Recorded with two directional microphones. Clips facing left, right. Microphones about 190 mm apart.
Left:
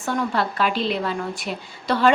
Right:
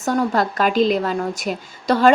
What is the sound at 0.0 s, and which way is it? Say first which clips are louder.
A woman's voice: right 4 dB; 40° right (ahead or behind).